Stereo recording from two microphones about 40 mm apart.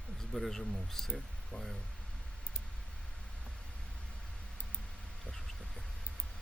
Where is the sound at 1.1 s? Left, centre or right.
Centre.